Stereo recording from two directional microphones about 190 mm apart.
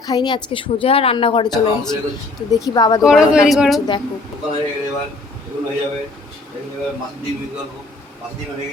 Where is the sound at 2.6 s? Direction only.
20° left (ahead or behind).